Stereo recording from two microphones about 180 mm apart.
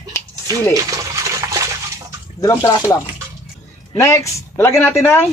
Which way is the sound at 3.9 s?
15° left (ahead or behind).